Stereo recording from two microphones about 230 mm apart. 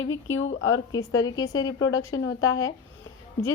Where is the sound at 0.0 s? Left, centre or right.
Left.